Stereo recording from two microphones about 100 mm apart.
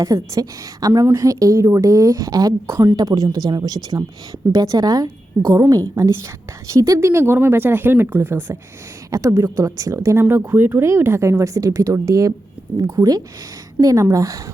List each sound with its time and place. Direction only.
0.0 s speech: 35° right (ahead or behind)